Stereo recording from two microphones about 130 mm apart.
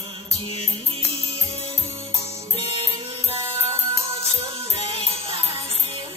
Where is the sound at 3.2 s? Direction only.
45° right (ahead or behind).